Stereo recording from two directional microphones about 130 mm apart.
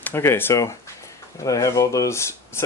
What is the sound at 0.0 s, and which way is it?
Speech, 20° left (ahead or behind).